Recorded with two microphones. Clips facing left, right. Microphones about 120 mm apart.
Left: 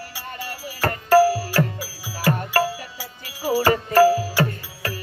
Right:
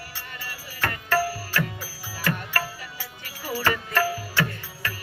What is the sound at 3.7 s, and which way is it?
Music, 40° left (ahead or behind).